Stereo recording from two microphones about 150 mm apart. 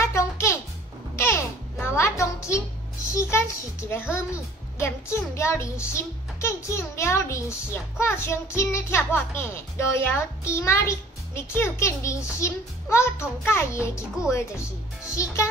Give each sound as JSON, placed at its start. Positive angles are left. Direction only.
{"t": 0.0, "sound": "music", "side_deg": 20}
{"t": 3.1, "sound": "a child's voice", "side_deg": 20}
{"t": 15.2, "sound": "a child's voice", "side_deg": 20}